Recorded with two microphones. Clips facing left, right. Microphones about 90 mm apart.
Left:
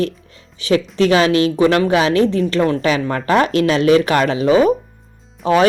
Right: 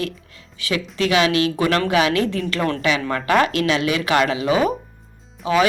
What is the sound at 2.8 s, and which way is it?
Speech, 40° left (ahead or behind).